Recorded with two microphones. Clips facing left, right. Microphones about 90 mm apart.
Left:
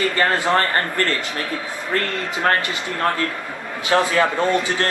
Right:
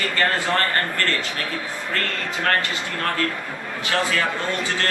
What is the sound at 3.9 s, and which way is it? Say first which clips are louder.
Speech: left 6 dB; 25° left (ahead or behind).